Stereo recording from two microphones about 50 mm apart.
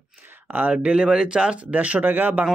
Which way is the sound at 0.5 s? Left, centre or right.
Right.